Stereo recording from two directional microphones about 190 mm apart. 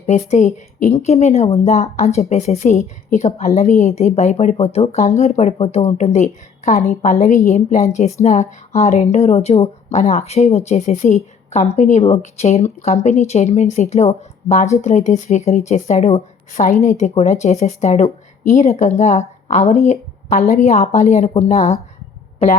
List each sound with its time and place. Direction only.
0.0 s a woman's voice: 35° left (ahead or behind)